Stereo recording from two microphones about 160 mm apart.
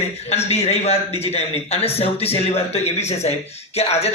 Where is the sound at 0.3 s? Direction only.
40° left (ahead or behind).